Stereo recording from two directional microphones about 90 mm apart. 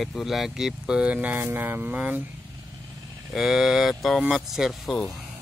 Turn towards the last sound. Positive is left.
turn(degrees=0)  # may be behind; listen again after turning